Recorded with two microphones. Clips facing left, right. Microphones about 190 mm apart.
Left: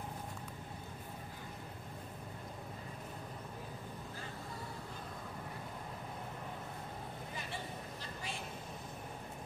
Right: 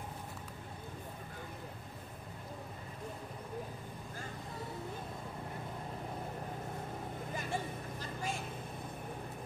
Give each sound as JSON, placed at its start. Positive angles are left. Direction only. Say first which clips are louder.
{"t": 7.3, "sound": "vehicle", "louder": "right 7 dB", "side_deg": -45}